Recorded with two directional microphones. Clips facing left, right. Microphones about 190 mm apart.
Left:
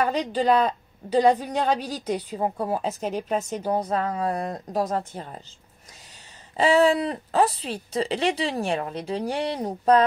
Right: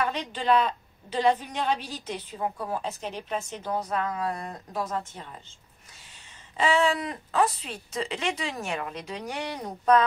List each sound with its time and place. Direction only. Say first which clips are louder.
0.0 s a woman's voice: left 6 dB; 35° left (ahead or behind)
6.5 s a woman's voice: left 5 dB; 35° left (ahead or behind)